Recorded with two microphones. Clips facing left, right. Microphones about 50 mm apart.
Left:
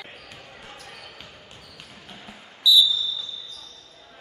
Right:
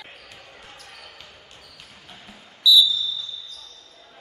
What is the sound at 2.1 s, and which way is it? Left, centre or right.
Basketball bounce, centre.